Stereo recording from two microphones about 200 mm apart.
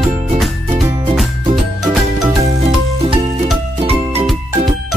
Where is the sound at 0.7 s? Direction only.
30° right (ahead or behind).